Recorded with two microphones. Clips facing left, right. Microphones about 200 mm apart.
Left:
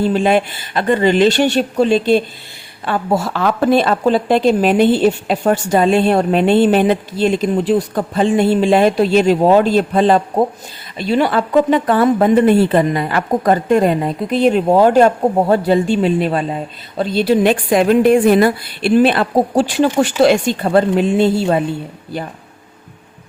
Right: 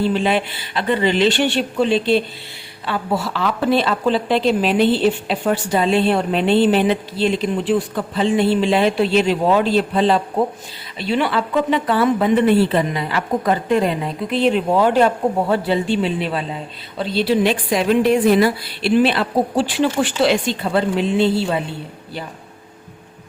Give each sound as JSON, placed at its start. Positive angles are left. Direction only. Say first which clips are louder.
{"t": 0.0, "sound": "a woman's voice", "louder": "left 4 dB", "side_deg": 45}